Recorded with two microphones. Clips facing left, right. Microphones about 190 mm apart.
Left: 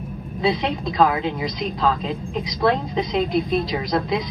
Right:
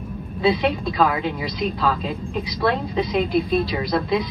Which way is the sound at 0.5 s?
20° left (ahead or behind).